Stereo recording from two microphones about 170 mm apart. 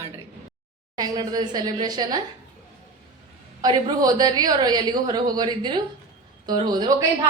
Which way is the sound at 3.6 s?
25° right (ahead or behind).